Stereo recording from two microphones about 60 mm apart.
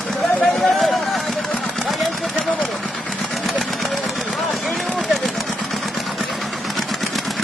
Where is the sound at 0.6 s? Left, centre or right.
Centre.